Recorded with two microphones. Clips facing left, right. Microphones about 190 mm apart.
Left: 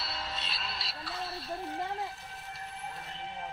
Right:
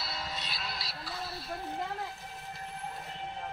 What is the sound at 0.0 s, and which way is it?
Music, 25° left (ahead or behind).